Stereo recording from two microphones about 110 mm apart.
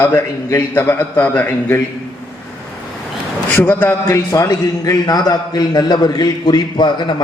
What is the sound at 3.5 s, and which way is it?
A man's voice, 20° left (ahead or behind).